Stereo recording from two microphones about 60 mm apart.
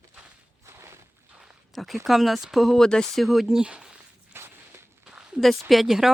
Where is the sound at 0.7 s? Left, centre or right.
Right.